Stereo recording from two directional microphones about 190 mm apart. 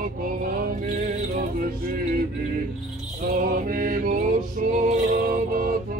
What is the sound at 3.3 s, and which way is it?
Music, 45° right (ahead or behind).